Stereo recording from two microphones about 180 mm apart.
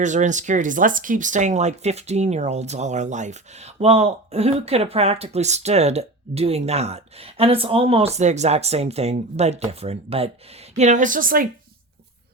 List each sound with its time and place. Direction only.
0.0 s speech: 45° right (ahead or behind)